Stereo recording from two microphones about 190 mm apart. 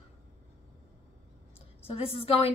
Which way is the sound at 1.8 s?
30° left (ahead or behind).